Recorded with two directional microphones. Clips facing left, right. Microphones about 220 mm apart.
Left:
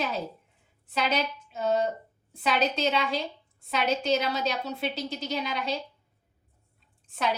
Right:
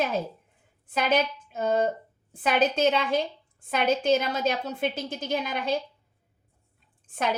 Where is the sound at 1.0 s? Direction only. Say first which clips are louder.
Right 4 dB; 50° right (ahead or behind).